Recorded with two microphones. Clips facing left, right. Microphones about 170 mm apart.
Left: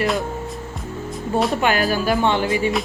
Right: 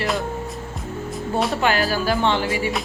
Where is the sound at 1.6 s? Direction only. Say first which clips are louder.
Left 1 dB; 20° left (ahead or behind).